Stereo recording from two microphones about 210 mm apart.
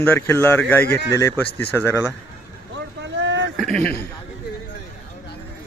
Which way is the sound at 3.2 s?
60° right (ahead or behind).